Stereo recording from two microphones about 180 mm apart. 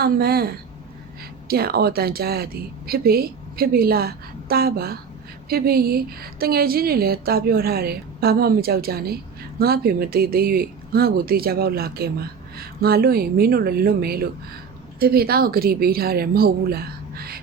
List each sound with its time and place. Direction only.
0.0 s a woman's voice: 60° right (ahead or behind)
1.5 s a woman's voice: 60° right (ahead or behind)